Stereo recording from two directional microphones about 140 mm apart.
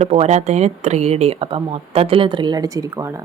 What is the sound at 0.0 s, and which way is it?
Speech, 50° right (ahead or behind).